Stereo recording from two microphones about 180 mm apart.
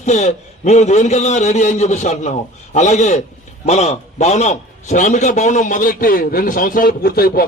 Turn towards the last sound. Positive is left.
turn(degrees=55)  # may be behind; listen again after turning